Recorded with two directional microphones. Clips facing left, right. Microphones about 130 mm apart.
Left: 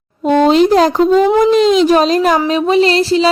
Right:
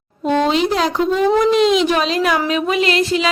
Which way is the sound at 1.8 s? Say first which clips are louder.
Left 6 dB; 40° left (ahead or behind).